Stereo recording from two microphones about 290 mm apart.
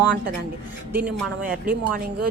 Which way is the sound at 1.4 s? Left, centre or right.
Right.